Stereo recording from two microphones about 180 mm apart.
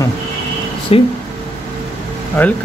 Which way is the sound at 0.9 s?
30° left (ahead or behind).